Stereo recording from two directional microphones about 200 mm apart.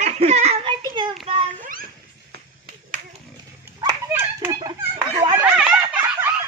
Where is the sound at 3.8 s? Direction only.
15° right (ahead or behind).